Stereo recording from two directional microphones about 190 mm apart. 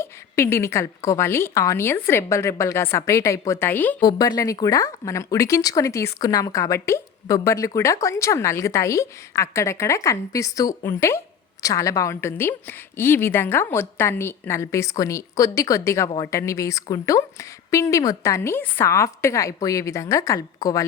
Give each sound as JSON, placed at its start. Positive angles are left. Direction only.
{"t": 0.0, "sound": "a woman's voice", "side_deg": 15}